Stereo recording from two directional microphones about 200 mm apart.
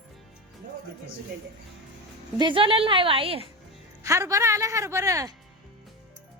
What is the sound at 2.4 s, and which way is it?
A woman's voice, 25° right (ahead or behind).